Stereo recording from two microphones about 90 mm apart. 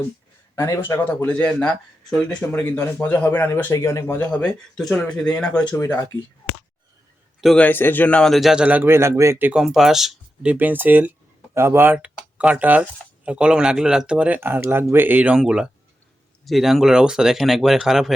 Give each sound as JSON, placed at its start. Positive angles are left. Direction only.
{"t": 0.5, "sound": "speech", "side_deg": 35}
{"t": 0.9, "sound": "a man's voice", "side_deg": 20}
{"t": 2.4, "sound": "a man's voice", "side_deg": 30}
{"t": 3.8, "sound": "speech", "side_deg": 35}
{"t": 4.0, "sound": "speech", "side_deg": 20}
{"t": 5.7, "sound": "speech", "side_deg": 35}
{"t": 7.5, "sound": "a man's voice", "side_deg": 20}
{"t": 8.2, "sound": "speech", "side_deg": 0}
{"t": 8.6, "sound": "speech", "side_deg": -15}
{"t": 8.9, "sound": "a man's voice", "side_deg": -30}
{"t": 9.6, "sound": "speech", "side_deg": -5}
{"t": 10.4, "sound": "speech", "side_deg": -15}
{"t": 11.9, "sound": "speech", "side_deg": -15}